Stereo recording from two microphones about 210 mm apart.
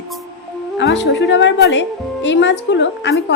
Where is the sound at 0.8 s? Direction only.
60° left (ahead or behind).